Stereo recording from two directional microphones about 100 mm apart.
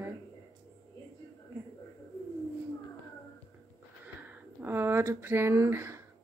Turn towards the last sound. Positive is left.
turn(degrees=-25)  # may be behind; listen again after turning